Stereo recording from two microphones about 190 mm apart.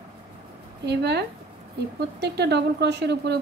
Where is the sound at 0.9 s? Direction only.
60° right (ahead or behind).